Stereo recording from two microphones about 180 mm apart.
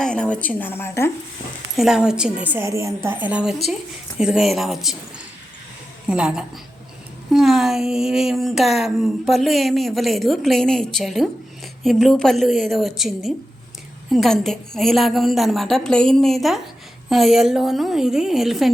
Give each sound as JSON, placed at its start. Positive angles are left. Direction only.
{"t": 0.0, "sound": "a woman's voice", "side_deg": 5}
{"t": 1.7, "sound": "a woman's voice", "side_deg": -5}
{"t": 6.1, "sound": "speech", "side_deg": -5}